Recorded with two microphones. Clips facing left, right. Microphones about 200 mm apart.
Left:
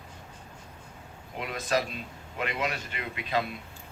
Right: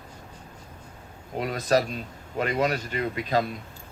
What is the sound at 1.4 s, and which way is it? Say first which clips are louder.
Speech: right 6 dB; 40° right (ahead or behind).